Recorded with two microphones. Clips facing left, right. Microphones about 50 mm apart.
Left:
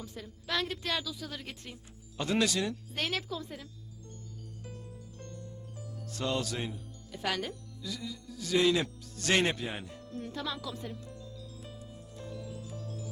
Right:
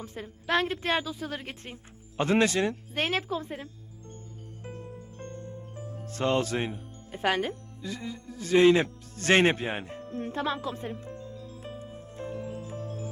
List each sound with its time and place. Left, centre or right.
0.0 s a woman's voice: right
4.6 s music: right